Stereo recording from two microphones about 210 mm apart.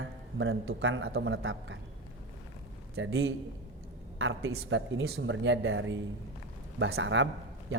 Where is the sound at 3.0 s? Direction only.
65° right (ahead or behind).